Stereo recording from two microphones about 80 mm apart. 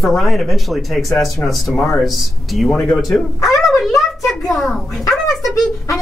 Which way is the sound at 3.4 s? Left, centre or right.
Left.